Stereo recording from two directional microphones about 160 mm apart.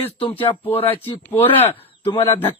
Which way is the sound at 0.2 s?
30° left (ahead or behind).